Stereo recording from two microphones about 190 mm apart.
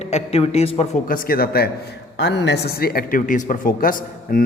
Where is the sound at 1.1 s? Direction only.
50° left (ahead or behind).